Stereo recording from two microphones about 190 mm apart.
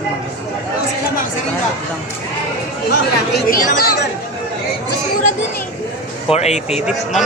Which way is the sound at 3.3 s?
50° left (ahead or behind).